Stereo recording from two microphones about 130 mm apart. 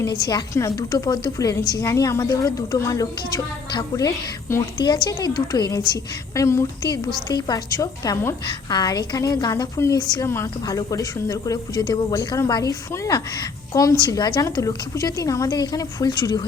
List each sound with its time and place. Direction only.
0.1 s a woman's voice: 35° left (ahead or behind)
4.8 s a woman's voice: 35° left (ahead or behind)